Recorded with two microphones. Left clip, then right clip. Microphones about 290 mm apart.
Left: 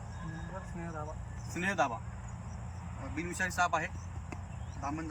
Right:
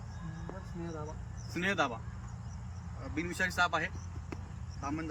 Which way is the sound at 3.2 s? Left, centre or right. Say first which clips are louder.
Right 1 dB; centre.